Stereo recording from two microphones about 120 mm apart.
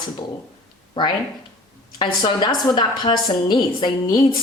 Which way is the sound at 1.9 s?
40° left (ahead or behind).